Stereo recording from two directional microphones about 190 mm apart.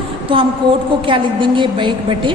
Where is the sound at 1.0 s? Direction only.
25° right (ahead or behind).